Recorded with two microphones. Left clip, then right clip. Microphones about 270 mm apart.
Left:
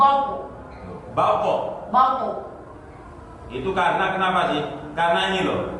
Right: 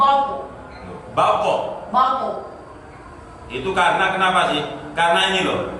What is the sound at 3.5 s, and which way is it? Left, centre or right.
A man's voice, centre.